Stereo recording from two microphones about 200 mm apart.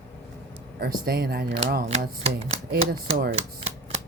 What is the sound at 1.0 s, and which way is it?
Speech, 50° right (ahead or behind).